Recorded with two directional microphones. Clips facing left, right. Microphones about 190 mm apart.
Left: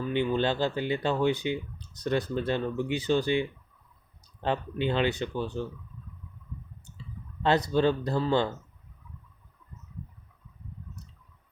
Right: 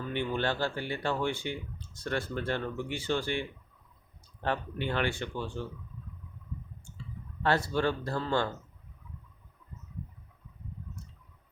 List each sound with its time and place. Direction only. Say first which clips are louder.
0.1 s speech: left 5 dB; 15° left (ahead or behind)
4.4 s speech: left 4 dB; 20° left (ahead or behind)
7.4 s speech: left 4 dB; 20° left (ahead or behind)